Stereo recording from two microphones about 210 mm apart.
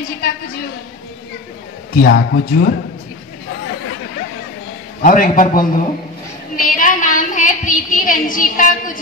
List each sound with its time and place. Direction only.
2.0 s speech: 45° left (ahead or behind)
5.0 s a man's voice: 40° left (ahead or behind)
6.5 s a sound: 40° left (ahead or behind)